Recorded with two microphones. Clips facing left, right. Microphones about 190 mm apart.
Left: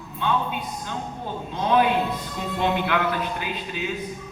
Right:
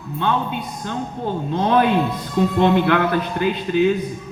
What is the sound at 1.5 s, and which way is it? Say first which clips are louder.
A man's voice: right 3 dB; 55° right (ahead or behind).